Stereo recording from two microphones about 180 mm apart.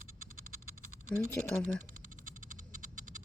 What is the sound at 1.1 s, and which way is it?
Speech, 5° left (ahead or behind).